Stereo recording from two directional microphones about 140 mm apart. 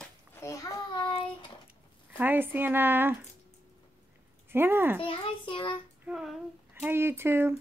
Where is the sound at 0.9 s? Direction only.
35° left (ahead or behind).